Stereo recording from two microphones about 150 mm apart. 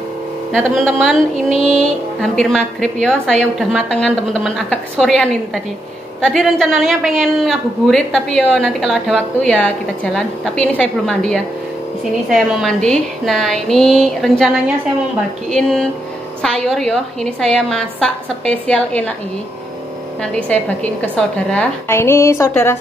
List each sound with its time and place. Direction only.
0.5 s a woman's voice: 5° left (ahead or behind)
12.3 s a woman's voice: 5° right (ahead or behind)
16.4 s a woman's voice: 5° left (ahead or behind)
20.3 s a woman's voice: 10° left (ahead or behind)